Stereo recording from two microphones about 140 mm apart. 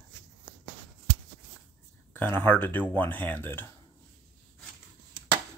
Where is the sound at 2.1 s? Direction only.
10° left (ahead or behind).